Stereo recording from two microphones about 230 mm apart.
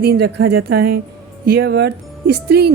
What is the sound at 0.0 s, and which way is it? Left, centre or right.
Speech, right.